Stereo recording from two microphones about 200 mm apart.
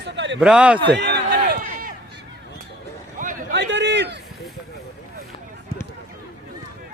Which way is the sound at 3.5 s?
60° right (ahead or behind).